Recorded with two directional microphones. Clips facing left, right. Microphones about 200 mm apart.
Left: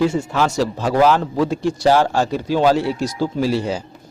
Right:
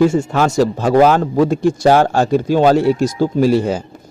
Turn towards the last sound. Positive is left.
turn(degrees=-50)  # may be behind; listen again after turning